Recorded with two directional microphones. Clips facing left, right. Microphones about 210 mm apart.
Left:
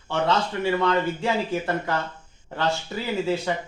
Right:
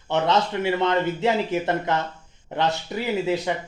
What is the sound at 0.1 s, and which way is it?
Speech, 20° right (ahead or behind).